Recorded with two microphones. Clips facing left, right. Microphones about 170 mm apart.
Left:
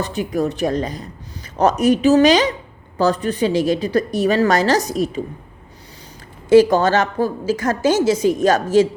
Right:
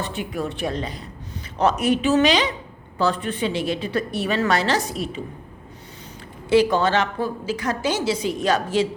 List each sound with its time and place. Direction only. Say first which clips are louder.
0.0 s a woman's voice: left 6 dB; 40° left (ahead or behind)
6.5 s a woman's voice: left 6 dB; 45° left (ahead or behind)